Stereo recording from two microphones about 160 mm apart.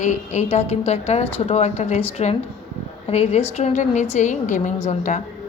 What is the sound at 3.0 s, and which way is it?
A woman's voice, 40° left (ahead or behind).